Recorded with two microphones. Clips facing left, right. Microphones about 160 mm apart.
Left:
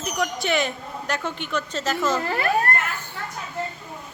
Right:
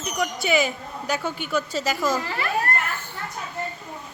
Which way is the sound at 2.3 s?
45° left (ahead or behind).